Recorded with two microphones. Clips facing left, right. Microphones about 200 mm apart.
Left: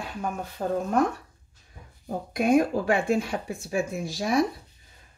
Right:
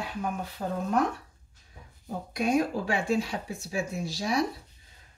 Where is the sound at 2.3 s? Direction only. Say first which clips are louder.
Left 5 dB; 50° left (ahead or behind).